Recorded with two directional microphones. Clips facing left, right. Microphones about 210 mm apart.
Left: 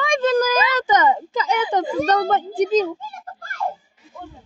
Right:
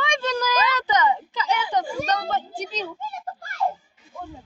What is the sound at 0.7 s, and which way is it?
A woman's voice, 50° left (ahead or behind).